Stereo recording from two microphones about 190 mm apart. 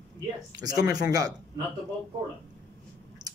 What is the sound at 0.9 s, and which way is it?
Speech, 20° right (ahead or behind).